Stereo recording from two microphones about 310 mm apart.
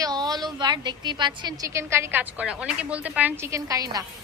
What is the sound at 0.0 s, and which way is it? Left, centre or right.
A woman's voice, centre.